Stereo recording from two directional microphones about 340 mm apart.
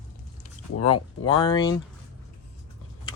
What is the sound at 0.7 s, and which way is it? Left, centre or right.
Speech, left.